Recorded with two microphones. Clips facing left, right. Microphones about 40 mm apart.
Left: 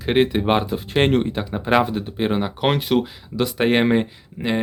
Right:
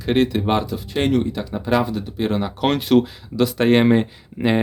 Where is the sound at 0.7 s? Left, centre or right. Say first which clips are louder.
Left 1 dB; left.